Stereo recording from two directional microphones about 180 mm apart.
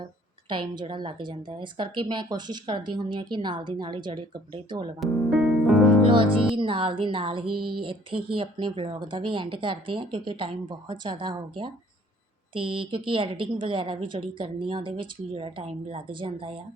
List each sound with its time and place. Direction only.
0.4 s a woman's voice: 25° right (ahead or behind)
4.9 s music: centre (ahead or behind)
6.1 s music: 30° right (ahead or behind)
6.6 s a woman's voice: 30° right (ahead or behind)